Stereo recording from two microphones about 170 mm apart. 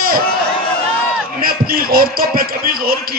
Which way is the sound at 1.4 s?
60° right (ahead or behind).